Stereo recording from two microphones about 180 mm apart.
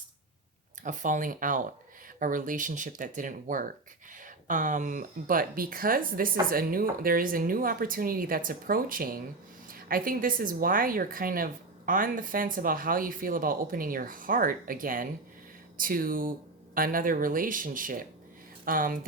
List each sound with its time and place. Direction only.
0.8 s speech: 45° right (ahead or behind)